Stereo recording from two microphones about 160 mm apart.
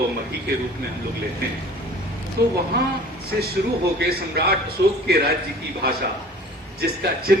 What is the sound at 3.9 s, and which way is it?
Speech, 80° right.